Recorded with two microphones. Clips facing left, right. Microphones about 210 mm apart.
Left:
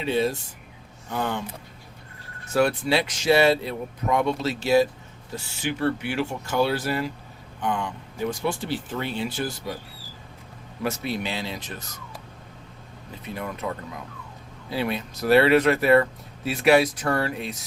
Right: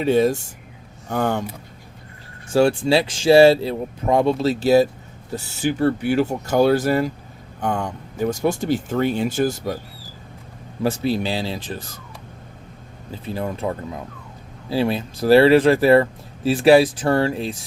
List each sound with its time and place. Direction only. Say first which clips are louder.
0.0 s speech: right 7 dB; 45° right (ahead or behind)
2.5 s speech: right 5 dB; 30° right (ahead or behind); by 9.7 s 45° right (ahead or behind)
10.8 s speech: right 7 dB; 30° right (ahead or behind)
13.2 s speech: right 6 dB; 30° right (ahead or behind)